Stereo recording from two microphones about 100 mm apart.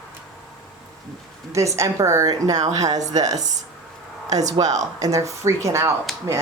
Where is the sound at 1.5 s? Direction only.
30° right (ahead or behind).